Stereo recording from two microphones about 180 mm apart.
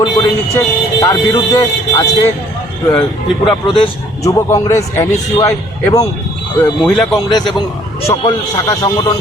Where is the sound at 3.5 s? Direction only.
25° left (ahead or behind).